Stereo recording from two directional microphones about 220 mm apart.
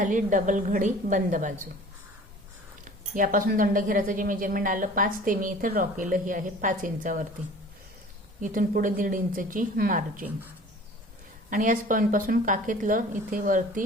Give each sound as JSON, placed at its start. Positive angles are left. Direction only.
{"t": 0.0, "sound": "a woman's voice", "side_deg": -35}
{"t": 2.8, "sound": "a woman's voice", "side_deg": -35}
{"t": 8.4, "sound": "a woman's voice", "side_deg": -40}
{"t": 11.5, "sound": "a woman's voice", "side_deg": -35}